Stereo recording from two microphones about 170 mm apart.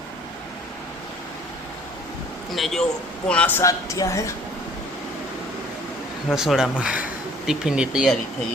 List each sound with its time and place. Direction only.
2.5 s speech: centre (ahead or behind); by 4.4 s 15° left (ahead or behind)
6.3 s speech: 5° right (ahead or behind)